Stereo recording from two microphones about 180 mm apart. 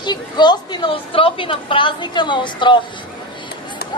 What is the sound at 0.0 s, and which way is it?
A woman's voice, 25° left (ahead or behind).